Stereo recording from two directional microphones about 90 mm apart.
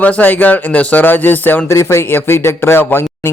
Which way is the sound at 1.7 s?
35° left (ahead or behind).